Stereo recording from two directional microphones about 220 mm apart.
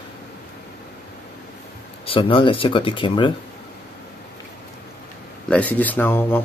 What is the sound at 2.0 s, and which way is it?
Speech, 25° left (ahead or behind).